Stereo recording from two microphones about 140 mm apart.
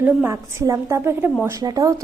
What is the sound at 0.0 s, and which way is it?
A woman's voice, 15° right (ahead or behind).